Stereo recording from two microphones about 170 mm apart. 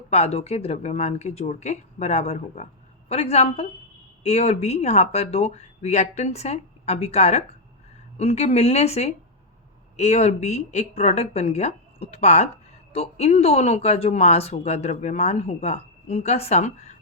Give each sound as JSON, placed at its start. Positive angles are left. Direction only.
{"t": 0.1, "sound": "speech", "side_deg": 40}